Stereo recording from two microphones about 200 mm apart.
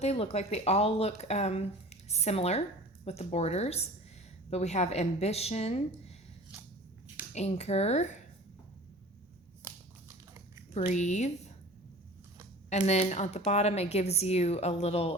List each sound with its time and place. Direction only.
0.0 s speech: 30° left (ahead or behind)
7.3 s speech: 35° left (ahead or behind)
10.8 s speech: 35° left (ahead or behind)
12.7 s speech: 35° left (ahead or behind)